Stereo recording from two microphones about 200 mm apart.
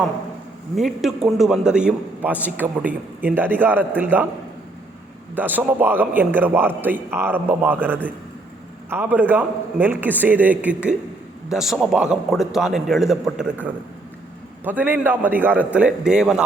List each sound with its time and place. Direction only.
0.8 s a man's voice: centre (ahead or behind)
5.3 s a man's voice: 10° right (ahead or behind)